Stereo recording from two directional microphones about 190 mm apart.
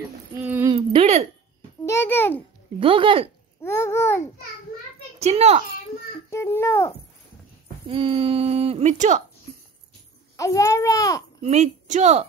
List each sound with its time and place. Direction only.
0.4 s a sound: 10° right (ahead or behind)
0.7 s a sound: 30° right (ahead or behind)
1.9 s babbling: 10° left (ahead or behind)
2.8 s speech: 30° right (ahead or behind)
3.6 s babbling: 15° left (ahead or behind)
5.2 s speech: 35° right (ahead or behind)
6.3 s a child's voice: 15° left (ahead or behind)
7.9 s speech: 30° right (ahead or behind)
10.3 s a child's voice: 15° left (ahead or behind)
11.4 s speech: 40° right (ahead or behind)